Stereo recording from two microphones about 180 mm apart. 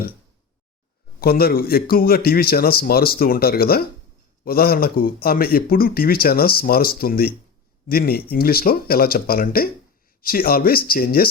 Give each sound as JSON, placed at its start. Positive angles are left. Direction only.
{"t": 1.2, "sound": "speech", "side_deg": 60}